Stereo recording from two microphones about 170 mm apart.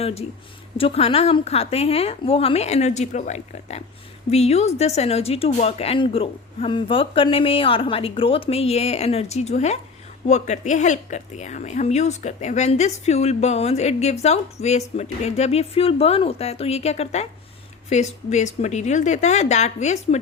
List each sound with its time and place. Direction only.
0.0 s a woman's voice: 35° left (ahead or behind)